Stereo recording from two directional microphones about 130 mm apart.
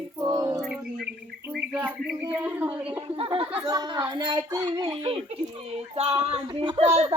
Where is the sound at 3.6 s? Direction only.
30° right (ahead or behind); by 6.9 s 45° right (ahead or behind).